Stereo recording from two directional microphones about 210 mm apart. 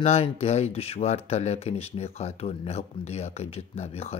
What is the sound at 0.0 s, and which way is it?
Speech, 30° left (ahead or behind).